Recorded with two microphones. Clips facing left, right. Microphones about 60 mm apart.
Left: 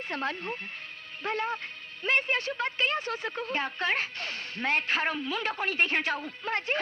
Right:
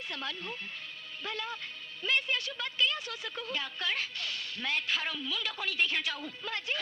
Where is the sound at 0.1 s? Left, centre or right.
Left.